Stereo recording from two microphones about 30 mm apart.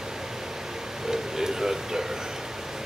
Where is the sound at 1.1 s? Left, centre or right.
Centre.